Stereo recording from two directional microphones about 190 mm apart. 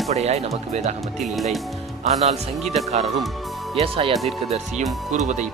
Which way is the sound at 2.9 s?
35° right (ahead or behind).